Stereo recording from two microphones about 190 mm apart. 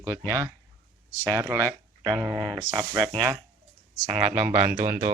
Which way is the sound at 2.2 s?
Centre (ahead or behind).